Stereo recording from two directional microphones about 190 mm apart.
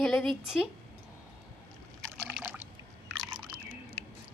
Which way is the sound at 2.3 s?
5° right (ahead or behind).